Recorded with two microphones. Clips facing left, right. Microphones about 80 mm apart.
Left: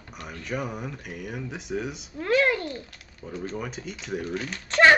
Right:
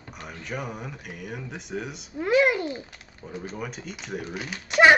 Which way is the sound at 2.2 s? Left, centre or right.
Centre.